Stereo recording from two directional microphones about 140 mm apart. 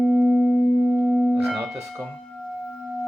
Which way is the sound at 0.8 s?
5° right (ahead or behind).